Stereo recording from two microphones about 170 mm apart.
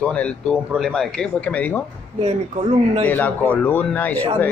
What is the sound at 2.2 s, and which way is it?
Speech, 40° right (ahead or behind).